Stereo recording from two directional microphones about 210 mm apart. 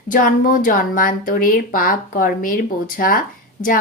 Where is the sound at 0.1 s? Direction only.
40° left (ahead or behind).